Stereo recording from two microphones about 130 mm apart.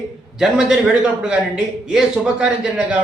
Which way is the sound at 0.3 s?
5° right (ahead or behind).